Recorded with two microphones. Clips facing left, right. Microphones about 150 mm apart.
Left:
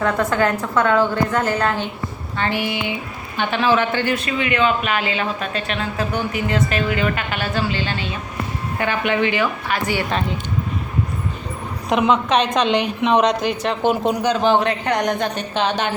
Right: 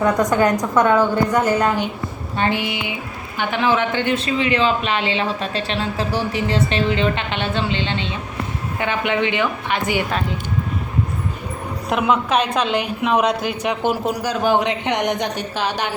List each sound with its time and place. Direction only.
0.0 s a woman's voice: 15° right (ahead or behind)
11.9 s a woman's voice: 5° right (ahead or behind)